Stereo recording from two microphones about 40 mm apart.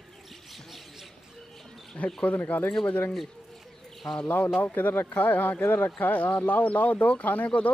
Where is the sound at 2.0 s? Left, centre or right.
Left.